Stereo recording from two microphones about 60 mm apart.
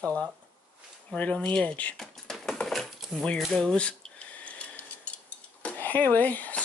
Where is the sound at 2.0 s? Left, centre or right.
Centre.